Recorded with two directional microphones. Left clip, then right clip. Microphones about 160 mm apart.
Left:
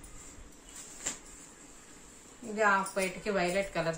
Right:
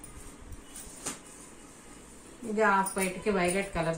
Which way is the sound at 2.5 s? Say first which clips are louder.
Right 2 dB; 45° left (ahead or behind).